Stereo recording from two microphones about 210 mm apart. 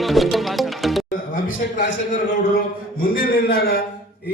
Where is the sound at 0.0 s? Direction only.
Centre (ahead or behind).